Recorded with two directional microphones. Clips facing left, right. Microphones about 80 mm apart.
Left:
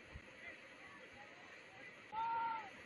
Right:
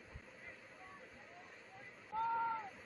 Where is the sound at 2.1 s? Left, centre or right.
Centre.